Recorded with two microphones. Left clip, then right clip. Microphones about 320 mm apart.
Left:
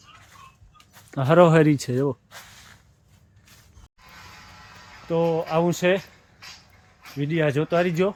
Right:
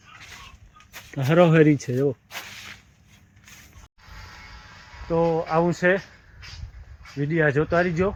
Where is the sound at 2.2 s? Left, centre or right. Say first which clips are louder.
Right 8 dB; right.